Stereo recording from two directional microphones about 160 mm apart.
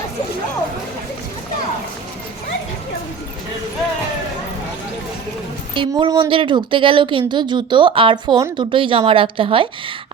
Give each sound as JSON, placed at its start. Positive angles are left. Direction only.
{"t": 5.7, "sound": "speech", "side_deg": -30}